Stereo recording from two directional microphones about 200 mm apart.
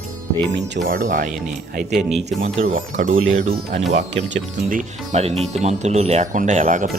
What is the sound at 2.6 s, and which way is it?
Speech, 40° right (ahead or behind).